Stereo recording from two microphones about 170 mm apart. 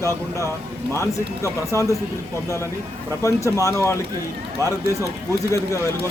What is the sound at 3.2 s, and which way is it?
Speech, 15° left (ahead or behind).